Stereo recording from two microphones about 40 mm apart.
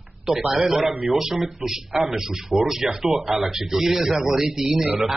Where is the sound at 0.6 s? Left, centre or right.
Centre.